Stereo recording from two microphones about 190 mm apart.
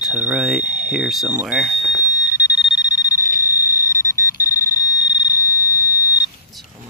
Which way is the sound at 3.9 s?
15° left (ahead or behind).